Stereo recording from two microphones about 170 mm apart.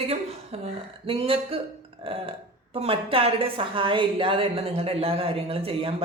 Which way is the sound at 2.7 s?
35° right (ahead or behind).